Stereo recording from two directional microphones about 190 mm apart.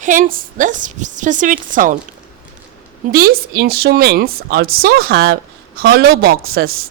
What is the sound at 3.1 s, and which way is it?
Speech, 50° right (ahead or behind).